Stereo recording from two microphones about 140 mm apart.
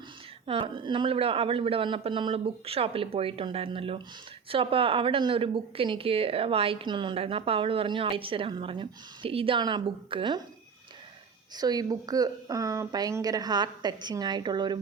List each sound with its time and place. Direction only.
0.4 s speech: 35° right (ahead or behind)
11.5 s speech: 30° right (ahead or behind)